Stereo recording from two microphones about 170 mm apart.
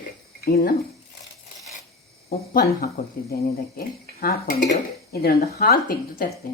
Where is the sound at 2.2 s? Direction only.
60° left (ahead or behind).